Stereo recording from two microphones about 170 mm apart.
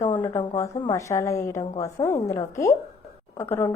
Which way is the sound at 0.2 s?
15° left (ahead or behind).